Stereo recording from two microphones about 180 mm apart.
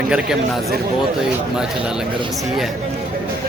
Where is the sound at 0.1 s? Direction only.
5° right (ahead or behind).